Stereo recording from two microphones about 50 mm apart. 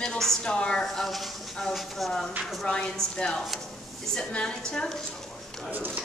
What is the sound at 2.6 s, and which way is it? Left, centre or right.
A woman's voice, centre.